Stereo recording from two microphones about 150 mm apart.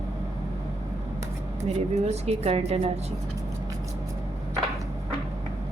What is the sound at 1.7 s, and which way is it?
A woman's voice, 45° right (ahead or behind).